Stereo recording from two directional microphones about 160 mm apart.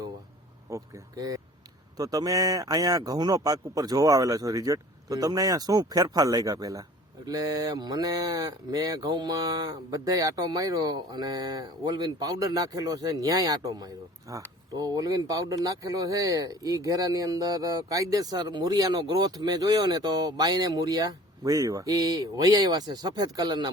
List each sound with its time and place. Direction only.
0.7 s speech: 20° right (ahead or behind)